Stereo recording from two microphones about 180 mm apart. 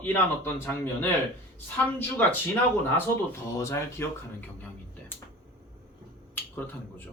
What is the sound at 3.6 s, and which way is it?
Speech, 15° left (ahead or behind).